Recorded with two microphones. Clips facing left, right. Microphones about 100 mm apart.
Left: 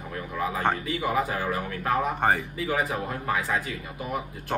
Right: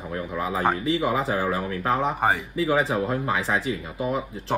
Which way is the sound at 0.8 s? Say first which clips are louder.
Right 3 dB; 30° right (ahead or behind).